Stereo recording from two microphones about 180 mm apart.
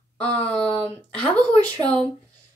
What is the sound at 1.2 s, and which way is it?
Speech, 5° left (ahead or behind).